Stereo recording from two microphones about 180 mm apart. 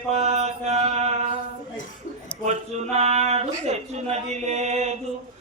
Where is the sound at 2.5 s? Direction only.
40° right (ahead or behind).